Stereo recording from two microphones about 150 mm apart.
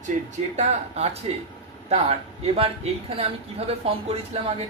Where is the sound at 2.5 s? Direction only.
40° right (ahead or behind).